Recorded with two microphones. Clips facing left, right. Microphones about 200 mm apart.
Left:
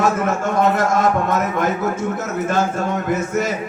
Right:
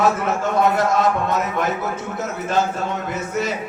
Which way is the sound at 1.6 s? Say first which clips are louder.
Left 4 dB; 50° left (ahead or behind).